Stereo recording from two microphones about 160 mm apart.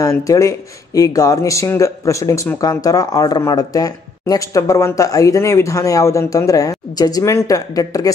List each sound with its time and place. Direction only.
0.0 s speech: 20° left (ahead or behind)